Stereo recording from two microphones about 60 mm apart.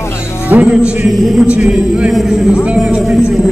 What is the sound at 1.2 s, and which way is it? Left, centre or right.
Speech, centre.